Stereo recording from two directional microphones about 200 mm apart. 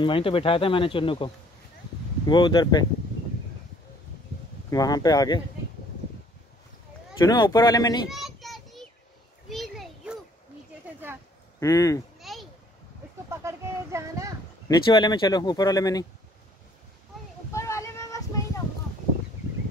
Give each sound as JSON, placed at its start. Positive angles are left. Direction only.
{"t": 0.0, "sound": "speech", "side_deg": 25}
{"t": 4.6, "sound": "speech", "side_deg": 20}
{"t": 7.2, "sound": "speech", "side_deg": 20}
{"t": 8.1, "sound": "child singing", "side_deg": 0}
{"t": 9.5, "sound": "a sound", "side_deg": 0}
{"t": 11.6, "sound": "speech", "side_deg": 15}
{"t": 12.2, "sound": "a sound", "side_deg": 0}
{"t": 13.3, "sound": "a sound", "side_deg": -15}
{"t": 14.7, "sound": "speech", "side_deg": 20}
{"t": 17.5, "sound": "child singing", "side_deg": 15}